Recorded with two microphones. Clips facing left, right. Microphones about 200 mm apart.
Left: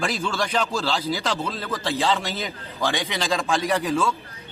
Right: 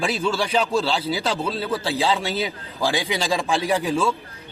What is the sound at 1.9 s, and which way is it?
Speech, 5° right (ahead or behind).